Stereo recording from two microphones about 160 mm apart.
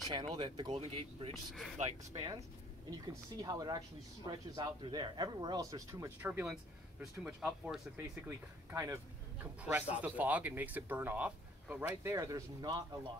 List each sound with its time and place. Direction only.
0.1 s speech: 30° right (ahead or behind)
2.9 s speech: 25° right (ahead or behind)
6.5 s speech: 5° right (ahead or behind)
8.3 s speech: 20° right (ahead or behind)